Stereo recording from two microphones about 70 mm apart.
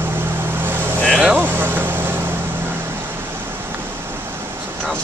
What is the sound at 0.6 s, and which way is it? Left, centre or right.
Vehicle, right.